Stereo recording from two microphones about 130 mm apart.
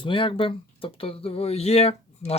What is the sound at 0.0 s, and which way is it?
Speech, 40° left (ahead or behind).